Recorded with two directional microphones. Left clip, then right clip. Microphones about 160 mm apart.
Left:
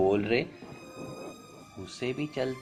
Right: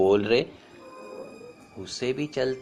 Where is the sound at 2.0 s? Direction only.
35° right (ahead or behind).